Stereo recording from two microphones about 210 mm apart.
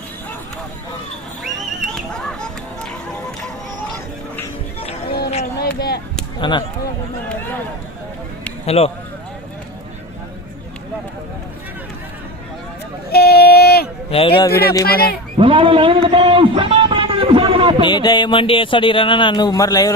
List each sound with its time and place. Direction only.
1.8 s horse: 5° left (ahead or behind)
5.5 s a sound: 50° left (ahead or behind)
6.4 s speech: 20° left (ahead or behind)
8.6 s speech: 30° left (ahead or behind)
13.1 s a sound: 50° left (ahead or behind)
14.1 s speech: 25° left (ahead or behind)
14.5 s speech: 50° left (ahead or behind)
15.4 s a man's voice: 25° right (ahead or behind)
17.8 s speech: 20° left (ahead or behind)